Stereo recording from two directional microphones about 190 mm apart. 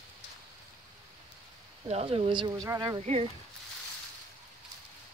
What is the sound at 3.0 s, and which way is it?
Speech, 35° right (ahead or behind).